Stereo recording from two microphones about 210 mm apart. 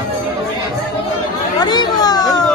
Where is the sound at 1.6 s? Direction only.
20° left (ahead or behind).